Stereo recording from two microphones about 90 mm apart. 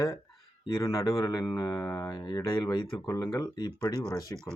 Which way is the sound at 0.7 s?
40° left (ahead or behind).